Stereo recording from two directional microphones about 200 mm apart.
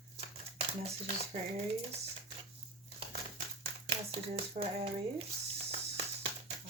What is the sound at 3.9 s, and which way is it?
Speech, 30° right (ahead or behind).